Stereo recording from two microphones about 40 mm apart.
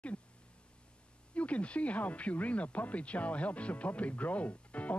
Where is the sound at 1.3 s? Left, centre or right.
Left.